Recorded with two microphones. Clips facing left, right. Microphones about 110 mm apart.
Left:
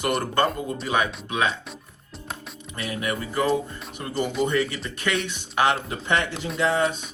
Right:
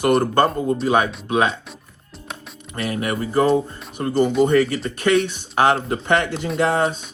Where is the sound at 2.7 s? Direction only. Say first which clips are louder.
Right 5 dB; 45° right (ahead or behind).